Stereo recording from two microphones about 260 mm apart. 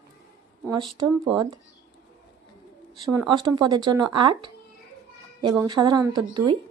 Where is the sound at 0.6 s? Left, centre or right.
Centre.